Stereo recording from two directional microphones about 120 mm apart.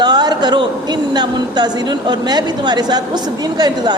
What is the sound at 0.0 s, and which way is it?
A man's voice, 35° right (ahead or behind).